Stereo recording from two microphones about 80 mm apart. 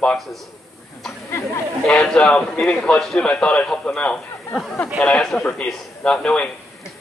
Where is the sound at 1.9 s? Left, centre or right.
Centre.